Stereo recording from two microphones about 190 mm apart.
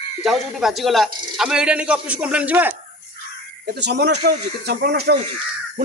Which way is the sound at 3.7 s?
60° right (ahead or behind).